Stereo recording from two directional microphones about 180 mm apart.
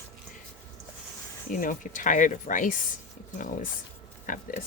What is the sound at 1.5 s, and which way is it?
Speech, 50° left (ahead or behind).